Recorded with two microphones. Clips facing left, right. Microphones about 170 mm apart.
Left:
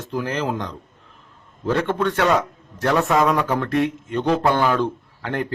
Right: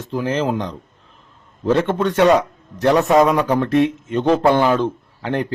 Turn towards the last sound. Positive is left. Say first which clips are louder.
# right 4 dB
turn(degrees=-20)  # may be behind; listen again after turning